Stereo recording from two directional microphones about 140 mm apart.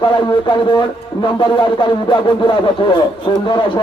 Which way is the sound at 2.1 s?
35° left (ahead or behind).